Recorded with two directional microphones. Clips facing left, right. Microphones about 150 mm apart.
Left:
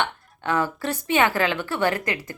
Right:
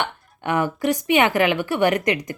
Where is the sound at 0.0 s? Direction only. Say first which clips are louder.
Even; 15° right (ahead or behind).